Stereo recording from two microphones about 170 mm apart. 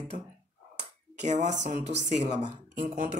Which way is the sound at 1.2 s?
45° right (ahead or behind).